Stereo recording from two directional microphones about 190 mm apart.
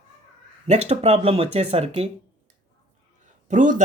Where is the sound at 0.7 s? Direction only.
35° right (ahead or behind).